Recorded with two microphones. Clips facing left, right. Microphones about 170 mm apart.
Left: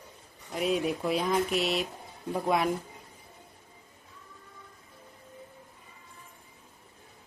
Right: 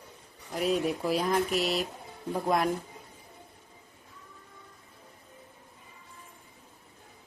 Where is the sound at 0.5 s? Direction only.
Centre (ahead or behind).